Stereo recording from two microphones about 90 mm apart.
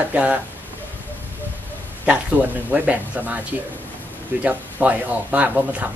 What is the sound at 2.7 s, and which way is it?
Speech, 20° right (ahead or behind).